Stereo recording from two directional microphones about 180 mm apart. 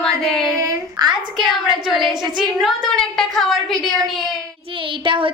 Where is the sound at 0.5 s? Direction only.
20° right (ahead or behind).